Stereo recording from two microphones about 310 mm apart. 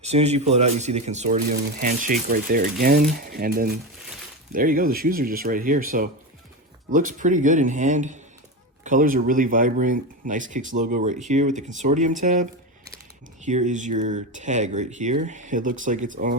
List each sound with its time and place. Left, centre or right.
0.0 s speech: right